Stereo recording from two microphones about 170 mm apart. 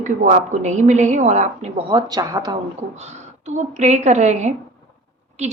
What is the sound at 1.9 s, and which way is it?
Speech, 25° right (ahead or behind).